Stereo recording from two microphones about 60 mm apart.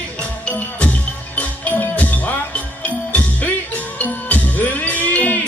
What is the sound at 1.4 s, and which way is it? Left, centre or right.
Music, left.